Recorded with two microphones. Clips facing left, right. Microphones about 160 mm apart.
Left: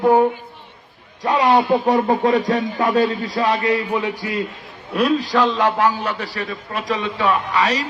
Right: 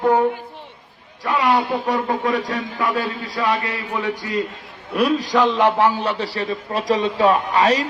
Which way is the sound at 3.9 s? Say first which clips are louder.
Left 2 dB; 10° left (ahead or behind).